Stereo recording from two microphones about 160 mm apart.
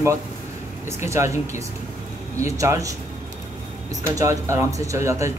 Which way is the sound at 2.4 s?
20° right (ahead or behind).